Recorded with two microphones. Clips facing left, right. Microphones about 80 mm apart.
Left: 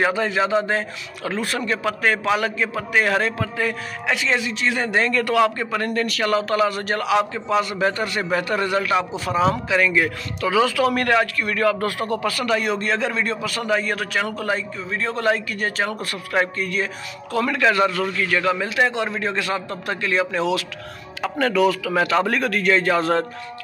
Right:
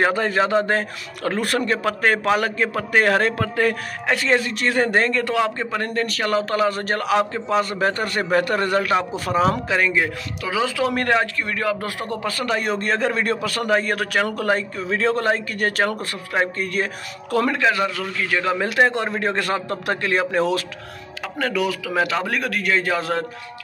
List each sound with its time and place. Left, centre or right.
0.0 s a man's voice: right
1.7 s a man's voice: right
4.1 s a man's voice: right
5.1 s a man's voice: right
9.8 s a man's voice: right
14.9 s speech: right
15.1 s a man's voice: right
15.5 s a man's voice: right
16.0 s a man's voice: right
16.5 s a man's voice: right
17.6 s a man's voice: centre
18.8 s a man's voice: right
21.2 s a man's voice: centre